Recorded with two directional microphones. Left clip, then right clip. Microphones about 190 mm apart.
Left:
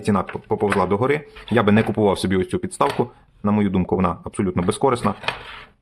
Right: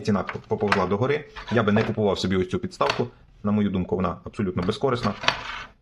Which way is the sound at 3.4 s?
30° left (ahead or behind).